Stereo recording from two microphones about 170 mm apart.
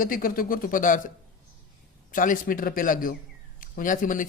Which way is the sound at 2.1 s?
50° left (ahead or behind).